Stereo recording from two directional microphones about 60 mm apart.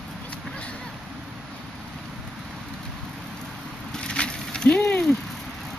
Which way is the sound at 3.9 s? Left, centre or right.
Centre.